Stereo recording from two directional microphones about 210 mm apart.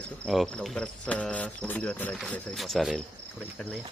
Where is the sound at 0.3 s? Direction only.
Centre (ahead or behind).